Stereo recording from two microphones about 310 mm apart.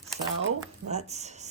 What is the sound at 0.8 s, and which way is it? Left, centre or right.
Speech, right.